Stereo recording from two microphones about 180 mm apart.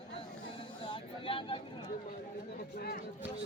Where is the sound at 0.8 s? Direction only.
30° left (ahead or behind).